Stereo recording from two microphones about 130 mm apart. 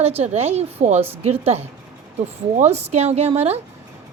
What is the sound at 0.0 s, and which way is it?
Speech, 55° right (ahead or behind).